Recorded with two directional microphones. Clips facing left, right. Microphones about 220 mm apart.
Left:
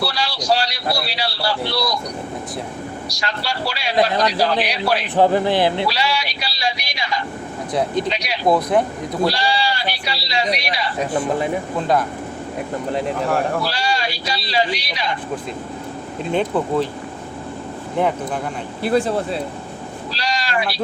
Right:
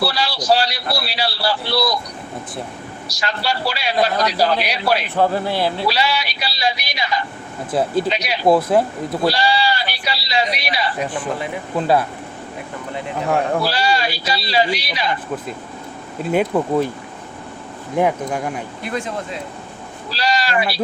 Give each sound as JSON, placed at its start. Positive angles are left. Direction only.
{"t": 0.0, "sound": "speech", "side_deg": -5}
{"t": 3.1, "sound": "speech", "side_deg": -5}
{"t": 5.1, "sound": "speech", "side_deg": 15}
{"t": 5.9, "sound": "speech", "side_deg": -5}
{"t": 13.7, "sound": "speech", "side_deg": -5}
{"t": 16.3, "sound": "speech", "side_deg": -10}
{"t": 17.9, "sound": "speech", "side_deg": -10}
{"t": 18.8, "sound": "speech", "side_deg": 35}
{"t": 20.1, "sound": "speech", "side_deg": -5}